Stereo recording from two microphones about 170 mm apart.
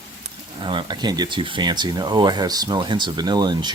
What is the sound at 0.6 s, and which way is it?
Speech, 30° right (ahead or behind).